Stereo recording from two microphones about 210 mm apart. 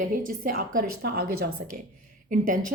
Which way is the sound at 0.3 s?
40° right (ahead or behind).